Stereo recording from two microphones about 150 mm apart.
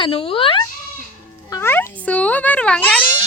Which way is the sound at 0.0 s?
35° left (ahead or behind).